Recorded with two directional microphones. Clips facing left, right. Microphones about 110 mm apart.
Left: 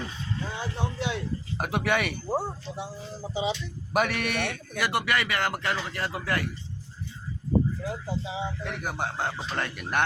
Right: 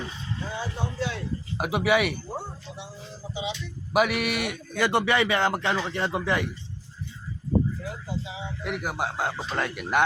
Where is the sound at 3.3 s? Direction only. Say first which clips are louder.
Left 4 dB; 40° left (ahead or behind).